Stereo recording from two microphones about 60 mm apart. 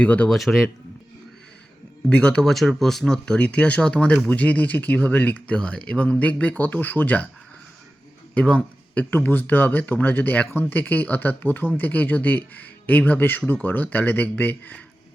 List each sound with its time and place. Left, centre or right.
0.0 s speech: left
0.3 s speech: centre
2.0 s speech: centre
2.4 s speech: centre; by 7.3 s left
8.4 s a man's voice: centre
9.0 s speech: left